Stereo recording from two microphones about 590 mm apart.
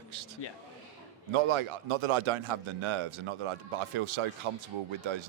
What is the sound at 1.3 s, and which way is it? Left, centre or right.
Speech, right.